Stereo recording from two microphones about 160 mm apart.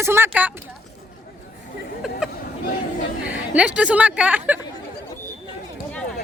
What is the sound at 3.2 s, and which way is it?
A woman's voice, 10° right (ahead or behind).